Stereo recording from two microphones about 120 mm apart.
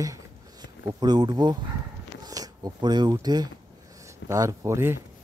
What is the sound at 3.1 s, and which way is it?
Speech, 35° right (ahead or behind).